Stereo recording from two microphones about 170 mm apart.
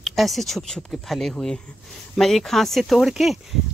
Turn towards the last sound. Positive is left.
turn(degrees=0)  # may be behind; listen again after turning